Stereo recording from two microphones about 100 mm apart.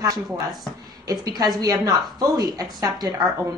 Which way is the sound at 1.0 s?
40° right (ahead or behind).